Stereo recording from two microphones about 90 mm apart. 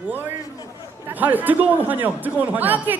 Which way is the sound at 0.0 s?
20° right (ahead or behind).